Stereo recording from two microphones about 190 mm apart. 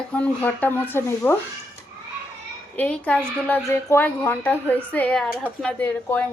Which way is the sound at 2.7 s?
5° left (ahead or behind).